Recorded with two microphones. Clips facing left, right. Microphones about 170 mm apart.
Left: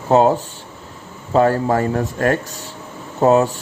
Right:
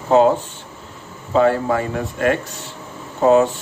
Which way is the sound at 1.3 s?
40° left (ahead or behind).